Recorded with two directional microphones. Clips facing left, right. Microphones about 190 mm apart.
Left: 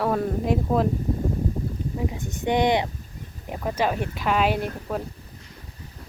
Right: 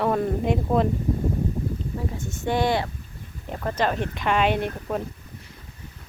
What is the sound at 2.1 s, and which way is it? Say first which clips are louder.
Speech: left 1 dB; 15° left (ahead or behind).